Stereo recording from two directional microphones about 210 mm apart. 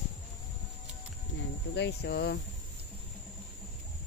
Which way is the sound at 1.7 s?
55° left (ahead or behind).